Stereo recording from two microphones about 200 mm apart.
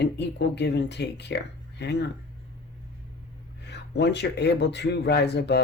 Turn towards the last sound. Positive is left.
turn(degrees=55)  # may be behind; listen again after turning